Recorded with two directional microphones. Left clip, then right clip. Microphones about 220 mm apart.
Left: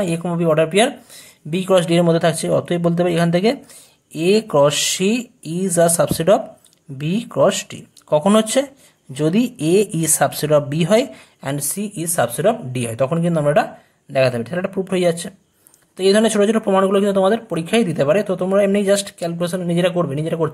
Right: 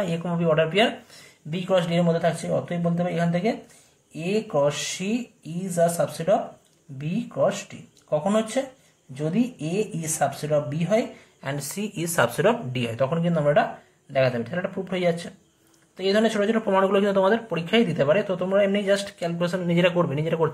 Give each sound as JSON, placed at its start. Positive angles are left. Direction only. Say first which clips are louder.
{"t": 0.0, "sound": "speech", "louder": "left 6 dB", "side_deg": 35}
{"t": 11.5, "sound": "speech", "louder": "left 4 dB", "side_deg": 20}